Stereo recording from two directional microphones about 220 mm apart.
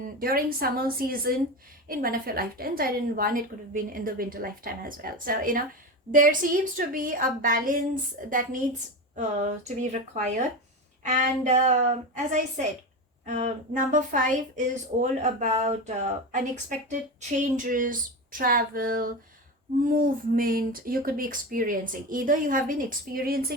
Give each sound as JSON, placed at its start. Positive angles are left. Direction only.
{"t": 0.2, "sound": "a woman's voice", "side_deg": -40}